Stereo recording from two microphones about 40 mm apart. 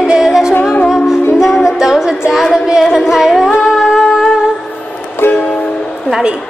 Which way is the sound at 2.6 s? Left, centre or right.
Centre.